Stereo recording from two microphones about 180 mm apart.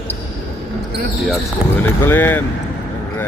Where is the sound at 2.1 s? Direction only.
10° left (ahead or behind).